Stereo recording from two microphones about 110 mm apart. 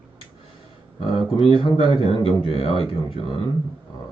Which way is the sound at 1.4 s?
50° left (ahead or behind).